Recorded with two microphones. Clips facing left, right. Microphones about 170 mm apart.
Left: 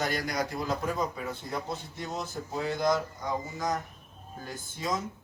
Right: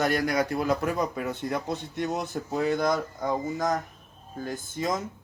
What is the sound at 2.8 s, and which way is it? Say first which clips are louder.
Speech: right 2 dB; 55° right (ahead or behind).